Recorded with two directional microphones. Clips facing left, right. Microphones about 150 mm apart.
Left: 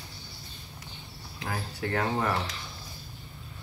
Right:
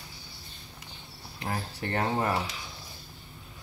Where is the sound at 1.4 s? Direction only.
25° right (ahead or behind).